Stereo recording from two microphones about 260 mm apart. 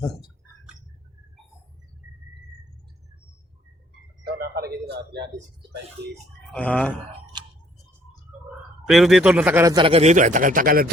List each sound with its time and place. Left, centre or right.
4.3 s a man's voice: right
6.5 s speech: centre
8.9 s a man's voice: centre; by 10.9 s right